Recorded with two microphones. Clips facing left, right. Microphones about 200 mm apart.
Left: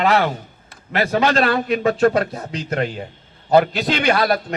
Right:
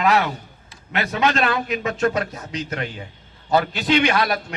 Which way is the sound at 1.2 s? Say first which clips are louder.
Left 3 dB; 35° left (ahead or behind).